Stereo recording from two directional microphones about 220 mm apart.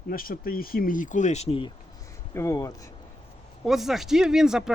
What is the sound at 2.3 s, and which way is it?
Speech, 15° left (ahead or behind).